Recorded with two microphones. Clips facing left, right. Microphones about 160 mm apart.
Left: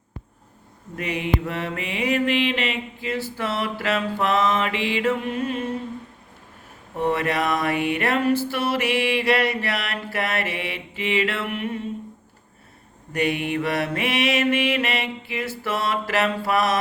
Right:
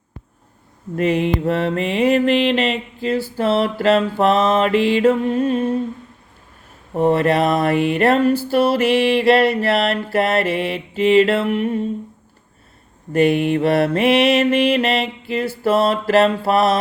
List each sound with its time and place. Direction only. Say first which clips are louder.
0.9 s mantra: right 7 dB; 35° right (ahead or behind)
6.9 s mantra: right 7 dB; 35° right (ahead or behind)
13.1 s mantra: right 8 dB; 35° right (ahead or behind)